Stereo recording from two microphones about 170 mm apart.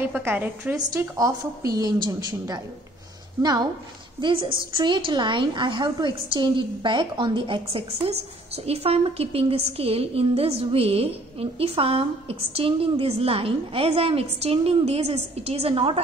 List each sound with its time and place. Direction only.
0.1 s a woman's voice: 10° right (ahead or behind)
4.2 s a woman's voice: 30° right (ahead or behind)